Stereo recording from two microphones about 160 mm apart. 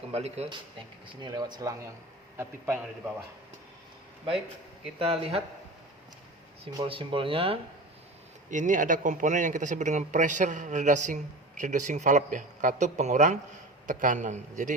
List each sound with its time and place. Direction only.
0.1 s speech: 40° right (ahead or behind)
1.0 s a man's voice: 25° right (ahead or behind)
4.9 s speech: 35° right (ahead or behind)
6.7 s speech: 35° right (ahead or behind)
8.4 s speech: 50° right (ahead or behind)